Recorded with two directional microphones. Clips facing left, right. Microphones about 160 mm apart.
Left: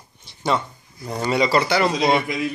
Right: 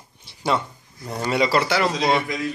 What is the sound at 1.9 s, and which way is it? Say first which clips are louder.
Speech: left 2 dB; 20° left (ahead or behind).